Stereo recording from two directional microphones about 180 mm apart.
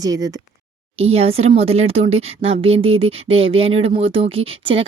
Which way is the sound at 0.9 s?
35° right (ahead or behind).